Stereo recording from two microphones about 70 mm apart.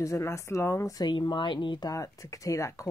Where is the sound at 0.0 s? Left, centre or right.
Left.